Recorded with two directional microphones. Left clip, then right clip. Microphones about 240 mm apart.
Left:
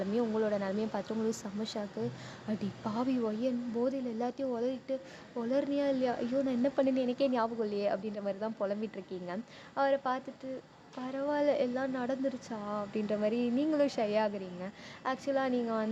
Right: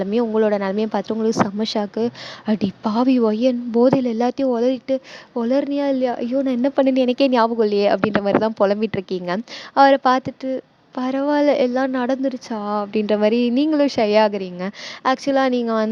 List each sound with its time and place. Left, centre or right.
0.0 s a woman's voice: right